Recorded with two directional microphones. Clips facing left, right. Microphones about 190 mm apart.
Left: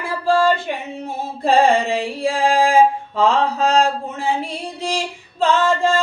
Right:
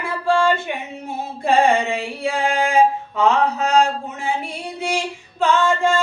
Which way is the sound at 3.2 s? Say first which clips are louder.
Left 1 dB; 30° left (ahead or behind).